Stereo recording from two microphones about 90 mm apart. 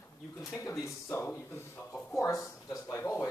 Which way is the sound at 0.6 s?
35° left (ahead or behind).